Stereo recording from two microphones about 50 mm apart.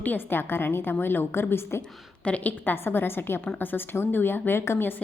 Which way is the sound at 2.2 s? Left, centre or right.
Left.